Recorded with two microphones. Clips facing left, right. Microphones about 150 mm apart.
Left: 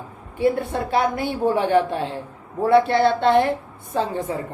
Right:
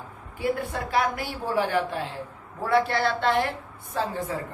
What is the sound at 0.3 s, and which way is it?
A woman's voice, 25° left (ahead or behind).